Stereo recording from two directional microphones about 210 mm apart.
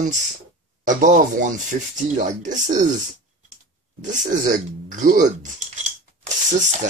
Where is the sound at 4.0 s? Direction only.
40° right (ahead or behind).